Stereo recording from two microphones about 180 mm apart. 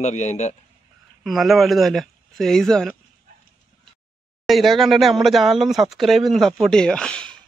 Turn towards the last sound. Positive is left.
turn(degrees=5)  # may be behind; listen again after turning